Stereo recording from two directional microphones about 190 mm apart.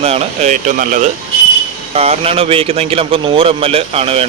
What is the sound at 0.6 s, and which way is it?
Speech, 45° right (ahead or behind).